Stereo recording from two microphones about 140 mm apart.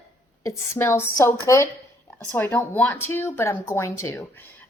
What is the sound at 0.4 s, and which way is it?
A woman's voice, 20° left (ahead or behind).